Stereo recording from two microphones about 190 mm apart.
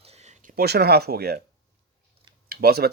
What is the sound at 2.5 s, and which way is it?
Speech, 55° right (ahead or behind).